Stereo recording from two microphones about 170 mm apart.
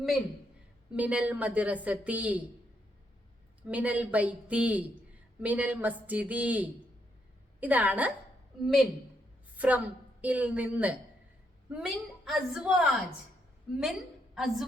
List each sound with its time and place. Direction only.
0.9 s a woman's voice: 10° right (ahead or behind)
3.7 s a woman's voice: 10° right (ahead or behind)
14.3 s a woman's voice: centre (ahead or behind)